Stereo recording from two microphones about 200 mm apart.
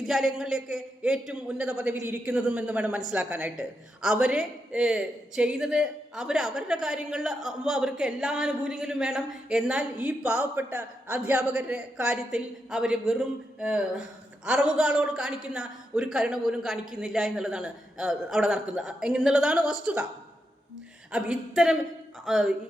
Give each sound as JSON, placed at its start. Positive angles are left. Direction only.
{"t": 0.0, "sound": "a man's voice", "side_deg": 0}
{"t": 21.1, "sound": "a man's voice", "side_deg": -5}